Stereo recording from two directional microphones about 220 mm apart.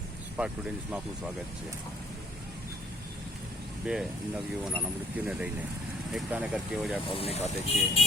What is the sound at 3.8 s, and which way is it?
Speech, 5° right (ahead or behind).